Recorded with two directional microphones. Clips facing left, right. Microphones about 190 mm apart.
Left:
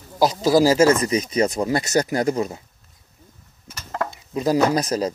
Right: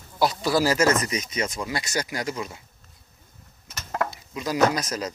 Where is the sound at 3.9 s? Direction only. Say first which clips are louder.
Left 1 dB; 10° right (ahead or behind).